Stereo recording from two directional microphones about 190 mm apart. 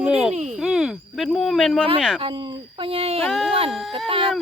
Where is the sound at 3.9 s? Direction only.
30° right (ahead or behind).